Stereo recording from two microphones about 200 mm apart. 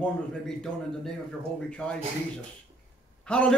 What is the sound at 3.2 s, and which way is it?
Speech, 5° left (ahead or behind).